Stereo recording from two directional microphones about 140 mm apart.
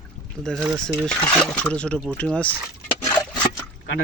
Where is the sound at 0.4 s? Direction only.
Centre (ahead or behind).